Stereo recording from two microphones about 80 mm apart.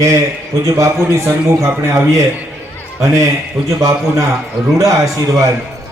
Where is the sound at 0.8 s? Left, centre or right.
Right.